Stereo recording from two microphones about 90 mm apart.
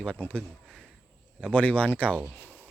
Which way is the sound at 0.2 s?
15° left (ahead or behind).